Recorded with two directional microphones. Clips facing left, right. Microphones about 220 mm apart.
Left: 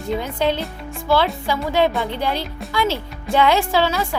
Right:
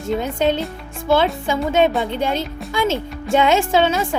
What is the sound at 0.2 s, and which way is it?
Speech, 20° right (ahead or behind).